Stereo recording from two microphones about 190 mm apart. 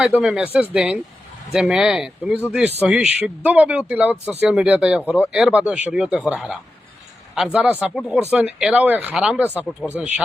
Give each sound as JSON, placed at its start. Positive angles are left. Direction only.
{"t": 0.0, "sound": "speech", "side_deg": -5}